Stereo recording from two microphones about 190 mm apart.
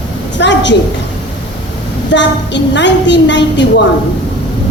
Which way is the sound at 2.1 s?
70° left (ahead or behind).